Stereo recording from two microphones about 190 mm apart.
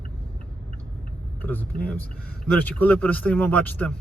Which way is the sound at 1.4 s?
10° left (ahead or behind).